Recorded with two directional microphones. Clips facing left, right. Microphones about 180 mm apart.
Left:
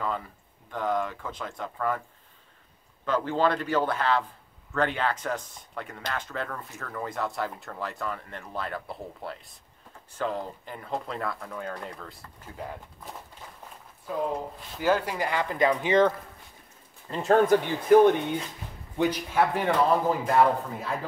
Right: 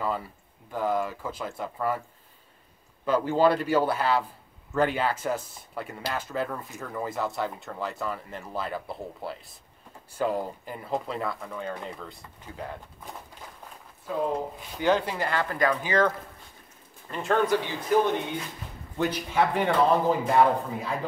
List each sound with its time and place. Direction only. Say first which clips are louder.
0.7 s speech: right 1 dB; 5° right (ahead or behind)
3.1 s speech: right 3 dB; 10° right (ahead or behind)
7.1 s speech: right 1 dB; centre (ahead or behind)
14.1 s speech: right 2 dB; 5° right (ahead or behind); by 16.1 s 25° left (ahead or behind)
17.1 s speech: left 4 dB; 40° left (ahead or behind)
18.9 s speech: left 1 dB; 10° left (ahead or behind)